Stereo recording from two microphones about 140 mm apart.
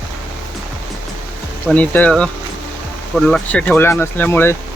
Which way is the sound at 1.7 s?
10° left (ahead or behind).